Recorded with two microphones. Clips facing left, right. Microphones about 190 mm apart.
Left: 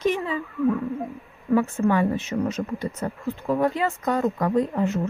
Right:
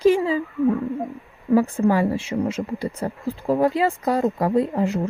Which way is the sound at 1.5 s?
35° right (ahead or behind).